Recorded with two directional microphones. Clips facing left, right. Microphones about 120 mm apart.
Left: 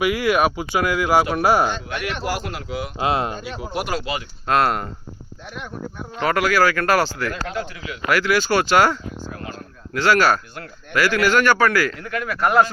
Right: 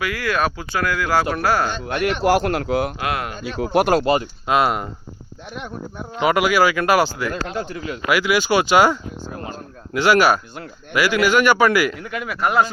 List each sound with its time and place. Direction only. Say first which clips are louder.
0.0 s speech: left 3 dB; 15° left (ahead or behind)
1.9 s speech: right 6 dB; 45° right (ahead or behind)
2.2 s speech: right 9 dB; 55° right (ahead or behind)
3.0 s speech: left 3 dB; 25° left (ahead or behind)
3.6 s speech: right 11 dB; 60° right (ahead or behind)
4.4 s a man's voice: left 1 dB; 5° right (ahead or behind)
6.1 s a man's voice: right 2 dB; 15° right (ahead or behind)
7.3 s speech: right 2 dB; 35° right (ahead or behind)
8.1 s a man's voice: right 1 dB; 10° right (ahead or behind)
9.3 s a sound: right 2 dB; 30° right (ahead or behind)
9.9 s a man's voice: right 2 dB; 15° right (ahead or behind)